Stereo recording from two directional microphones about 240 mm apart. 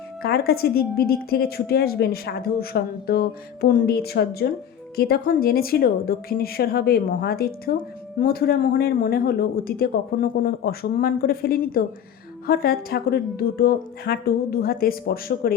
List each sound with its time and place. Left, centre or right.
0.2 s a woman's voice: left